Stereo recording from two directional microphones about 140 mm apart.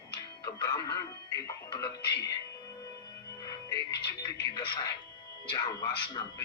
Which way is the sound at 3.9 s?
30° left (ahead or behind).